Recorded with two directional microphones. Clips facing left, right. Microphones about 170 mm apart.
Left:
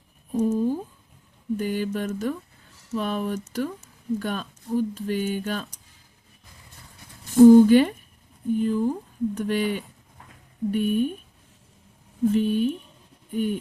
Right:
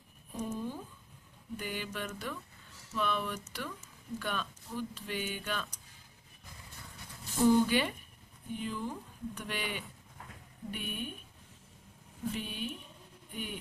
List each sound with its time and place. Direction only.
0.3 s a sound: 40° left (ahead or behind)
1.5 s speech: 40° left (ahead or behind)
7.4 s speech: 45° left (ahead or behind)
12.2 s speech: 45° left (ahead or behind)